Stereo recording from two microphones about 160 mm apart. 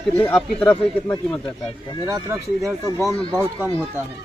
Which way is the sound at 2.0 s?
20° right (ahead or behind).